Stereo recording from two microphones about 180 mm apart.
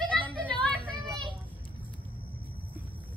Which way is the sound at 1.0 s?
25° right (ahead or behind).